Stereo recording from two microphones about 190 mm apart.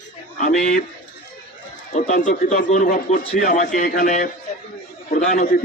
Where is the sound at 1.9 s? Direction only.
40° left (ahead or behind).